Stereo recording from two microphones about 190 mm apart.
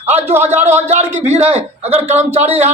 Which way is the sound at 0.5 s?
10° right (ahead or behind).